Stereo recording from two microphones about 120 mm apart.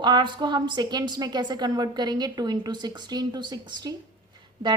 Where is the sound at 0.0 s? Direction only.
40° right (ahead or behind).